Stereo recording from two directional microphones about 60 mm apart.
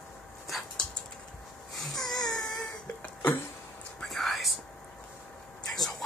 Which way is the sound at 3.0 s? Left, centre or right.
Left.